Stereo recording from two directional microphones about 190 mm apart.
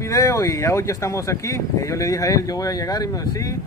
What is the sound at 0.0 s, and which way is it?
Speech, 15° left (ahead or behind).